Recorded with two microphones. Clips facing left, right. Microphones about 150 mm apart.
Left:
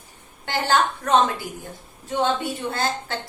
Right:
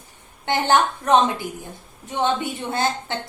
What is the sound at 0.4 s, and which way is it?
A woman's voice, 20° right (ahead or behind).